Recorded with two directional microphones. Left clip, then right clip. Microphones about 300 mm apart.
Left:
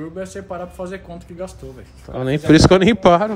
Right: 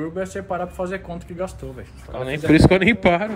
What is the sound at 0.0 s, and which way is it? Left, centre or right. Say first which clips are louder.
Speech: right 2 dB; centre.